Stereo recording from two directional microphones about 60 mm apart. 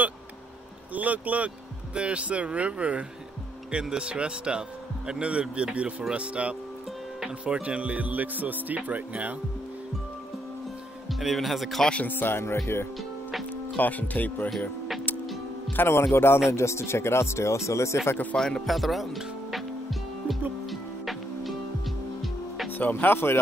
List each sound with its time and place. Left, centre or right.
0.9 s speech: right
11.1 s speech: centre
12.0 s speech: left
12.4 s speech: left
13.7 s speech: left
15.7 s speech: left
18.3 s speech: centre
18.7 s music: centre
22.7 s speech: left